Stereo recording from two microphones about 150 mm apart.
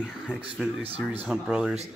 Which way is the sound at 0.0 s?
10° left (ahead or behind).